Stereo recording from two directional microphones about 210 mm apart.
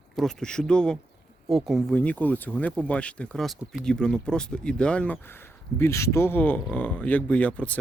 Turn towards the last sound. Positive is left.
turn(degrees=5)  # may be behind; listen again after turning